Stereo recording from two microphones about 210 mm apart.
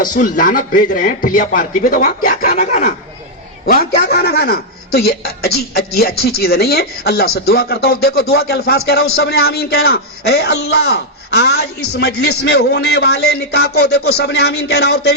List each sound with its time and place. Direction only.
0.0 s a man's voice: 40° left (ahead or behind)